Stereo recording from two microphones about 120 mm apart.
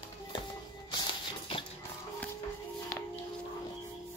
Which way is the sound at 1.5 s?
50° left (ahead or behind).